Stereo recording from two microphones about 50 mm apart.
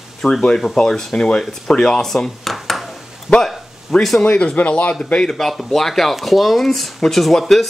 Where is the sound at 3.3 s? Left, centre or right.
Centre.